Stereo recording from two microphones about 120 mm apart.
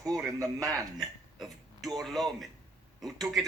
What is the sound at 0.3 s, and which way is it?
Speech, 30° right (ahead or behind).